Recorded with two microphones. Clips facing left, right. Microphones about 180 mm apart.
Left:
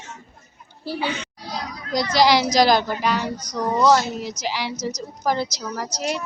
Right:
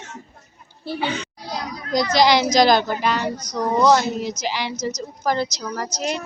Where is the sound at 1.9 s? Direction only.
5° left (ahead or behind).